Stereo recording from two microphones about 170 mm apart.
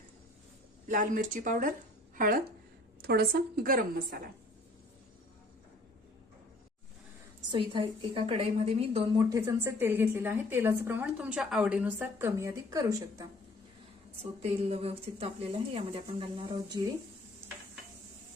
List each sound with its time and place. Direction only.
0.9 s a woman's voice: 50° right (ahead or behind)
3.0 s a woman's voice: 65° right (ahead or behind)
7.5 s a woman's voice: 30° right (ahead or behind)
9.3 s a woman's voice: 15° right (ahead or behind)
14.2 s a woman's voice: 35° right (ahead or behind)